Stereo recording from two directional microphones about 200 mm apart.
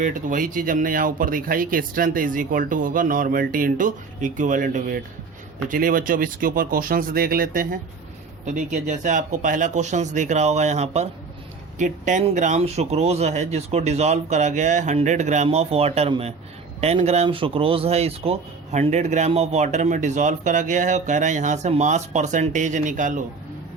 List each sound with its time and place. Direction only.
0.0 s speech: 40° right (ahead or behind)